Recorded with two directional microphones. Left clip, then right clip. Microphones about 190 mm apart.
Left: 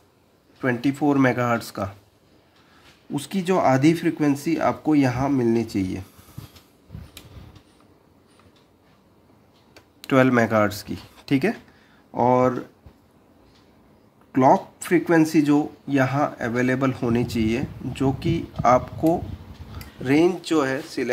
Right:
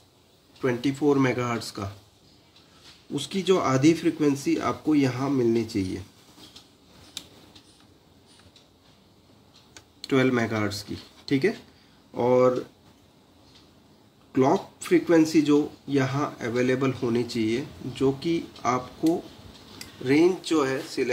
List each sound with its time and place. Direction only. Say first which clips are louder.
0.6 s speech: left 3 dB; 55° left (ahead or behind)
3.2 s speech: left 2 dB; 55° left (ahead or behind)
10.0 s speech: left 5 dB; 60° left (ahead or behind)
14.3 s speech: left 6 dB; 60° left (ahead or behind)